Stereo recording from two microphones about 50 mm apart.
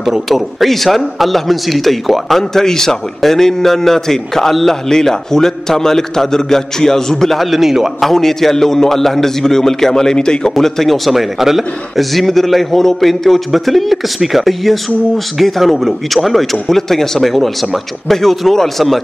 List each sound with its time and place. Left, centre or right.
0.0 s a man's voice: centre
8.1 s a man's voice: centre
10.5 s a man's voice: centre